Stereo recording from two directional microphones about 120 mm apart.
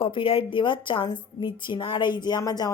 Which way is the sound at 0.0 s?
50° left (ahead or behind).